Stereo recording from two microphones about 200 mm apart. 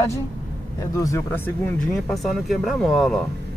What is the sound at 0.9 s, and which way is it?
Speech, 15° left (ahead or behind).